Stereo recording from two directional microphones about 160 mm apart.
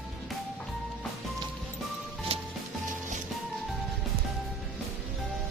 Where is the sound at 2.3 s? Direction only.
40° right (ahead or behind).